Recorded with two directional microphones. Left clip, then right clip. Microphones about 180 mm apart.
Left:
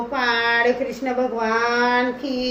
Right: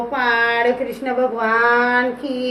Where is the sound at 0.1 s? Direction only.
5° right (ahead or behind).